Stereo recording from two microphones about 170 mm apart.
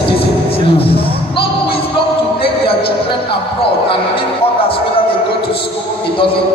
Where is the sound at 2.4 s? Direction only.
30° left (ahead or behind).